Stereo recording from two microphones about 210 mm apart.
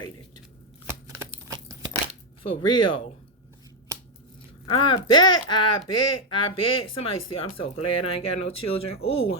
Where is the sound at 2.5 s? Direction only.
20° left (ahead or behind).